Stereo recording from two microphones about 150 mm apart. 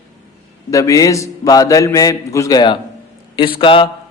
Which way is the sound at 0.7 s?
20° left (ahead or behind).